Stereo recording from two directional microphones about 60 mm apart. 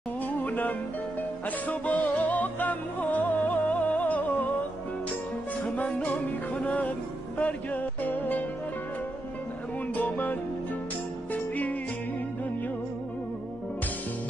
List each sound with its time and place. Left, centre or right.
0.4 s music: left
5.8 s music: left
9.9 s music: left